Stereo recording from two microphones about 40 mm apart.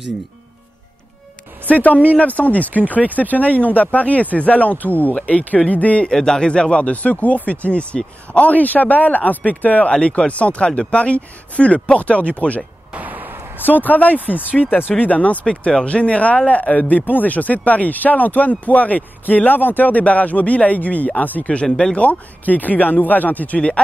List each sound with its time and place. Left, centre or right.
1.7 s speech: left
5.1 s speech: left
6.0 s speech: centre; by 9.8 s left
9.8 s speech: left
12.9 s a sound: right
13.7 s speech: left
21.6 s speech: centre
21.9 s speech: left